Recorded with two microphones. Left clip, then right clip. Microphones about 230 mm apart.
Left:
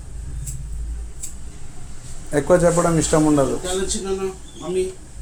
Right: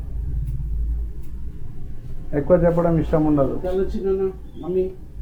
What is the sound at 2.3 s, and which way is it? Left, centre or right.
Speech, left.